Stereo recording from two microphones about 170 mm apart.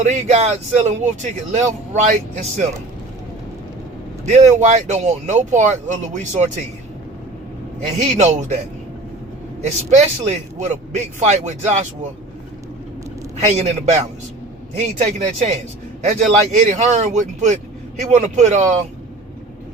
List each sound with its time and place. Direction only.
0.0 s speech: 45° right (ahead or behind)
4.3 s speech: 45° right (ahead or behind)
7.9 s speech: 45° right (ahead or behind)
9.6 s speech: 45° right (ahead or behind)
13.3 s speech: 40° right (ahead or behind)